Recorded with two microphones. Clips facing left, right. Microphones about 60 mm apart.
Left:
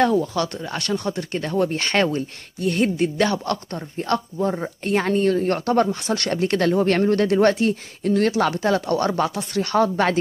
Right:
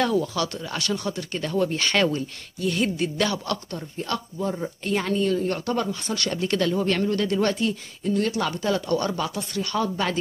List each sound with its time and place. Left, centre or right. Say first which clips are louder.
0.0 s speech: left 4 dB; left
1.0 s speech: left 3 dB; left